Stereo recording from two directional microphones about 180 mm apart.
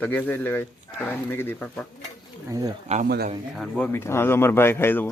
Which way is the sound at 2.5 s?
20° right (ahead or behind).